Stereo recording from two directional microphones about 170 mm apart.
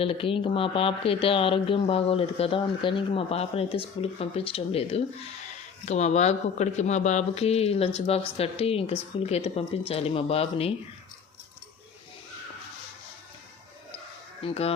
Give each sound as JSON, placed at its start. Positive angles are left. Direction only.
{"t": 0.0, "sound": "speech", "side_deg": 30}
{"t": 14.4, "sound": "speech", "side_deg": 35}